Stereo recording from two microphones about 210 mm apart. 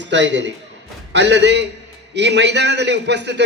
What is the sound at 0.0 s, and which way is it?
A man's voice, 60° right (ahead or behind).